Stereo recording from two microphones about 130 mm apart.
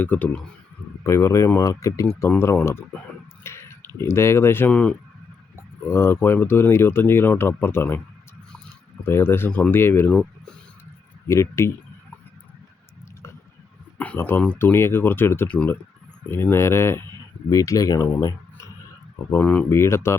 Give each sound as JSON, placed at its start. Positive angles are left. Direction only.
{"t": 0.0, "sound": "speech", "side_deg": 15}
{"t": 5.9, "sound": "speech", "side_deg": 20}
{"t": 9.0, "sound": "speech", "side_deg": 15}
{"t": 11.3, "sound": "speech", "side_deg": 20}
{"t": 14.0, "sound": "speech", "side_deg": 15}
{"t": 19.4, "sound": "speech", "side_deg": 10}
{"t": 19.8, "sound": "speech", "side_deg": 20}